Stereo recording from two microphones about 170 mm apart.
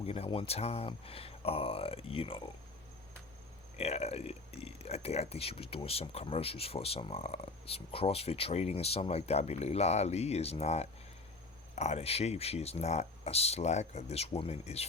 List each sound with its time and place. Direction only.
0.0 s speech: 35° left (ahead or behind)
3.8 s speech: 40° left (ahead or behind)